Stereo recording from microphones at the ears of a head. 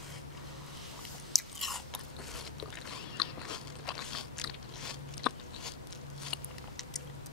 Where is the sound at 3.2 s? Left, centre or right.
Left.